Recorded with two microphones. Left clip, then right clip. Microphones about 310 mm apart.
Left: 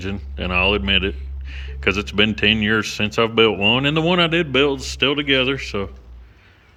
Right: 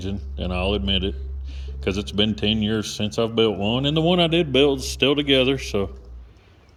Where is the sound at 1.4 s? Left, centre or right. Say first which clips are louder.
Left 8 dB; right.